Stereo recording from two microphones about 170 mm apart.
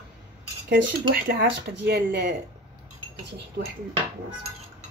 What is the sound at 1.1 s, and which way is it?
Speech, 65° right (ahead or behind).